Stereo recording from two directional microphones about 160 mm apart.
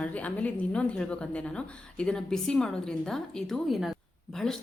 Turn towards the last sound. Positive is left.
turn(degrees=5)  # may be behind; listen again after turning